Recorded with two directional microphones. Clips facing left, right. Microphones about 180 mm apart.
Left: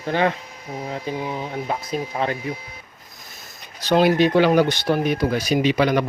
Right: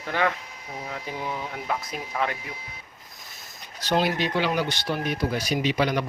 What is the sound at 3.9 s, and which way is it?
Speech, 55° left (ahead or behind).